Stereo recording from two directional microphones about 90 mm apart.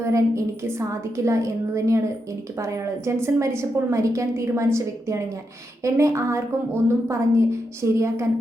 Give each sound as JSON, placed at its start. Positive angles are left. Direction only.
{"t": 0.0, "sound": "a woman's voice", "side_deg": -35}